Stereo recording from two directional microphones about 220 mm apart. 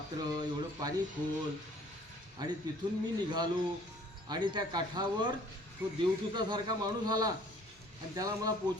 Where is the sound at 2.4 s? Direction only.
20° right (ahead or behind).